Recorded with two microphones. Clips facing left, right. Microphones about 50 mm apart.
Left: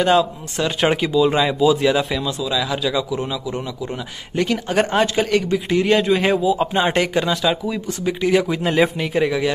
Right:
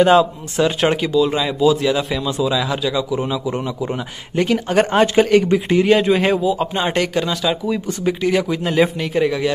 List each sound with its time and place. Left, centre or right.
0.0 s speech: centre
0.8 s speech: centre
2.2 s a man's voice: centre
4.5 s speech: centre